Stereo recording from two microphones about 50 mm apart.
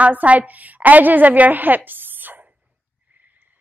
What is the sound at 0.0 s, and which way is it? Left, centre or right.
A woman's voice, right.